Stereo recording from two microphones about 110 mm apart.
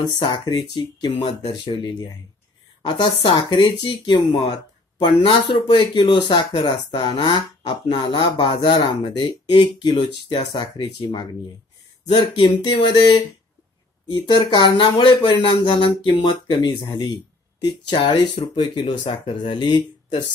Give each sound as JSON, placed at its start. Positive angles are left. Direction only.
{"t": 0.0, "sound": "speech", "side_deg": 45}
{"t": 2.9, "sound": "a woman's voice", "side_deg": 55}